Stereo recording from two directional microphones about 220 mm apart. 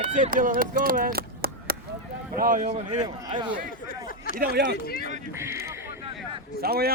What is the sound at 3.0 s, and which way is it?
Speech, 20° right (ahead or behind).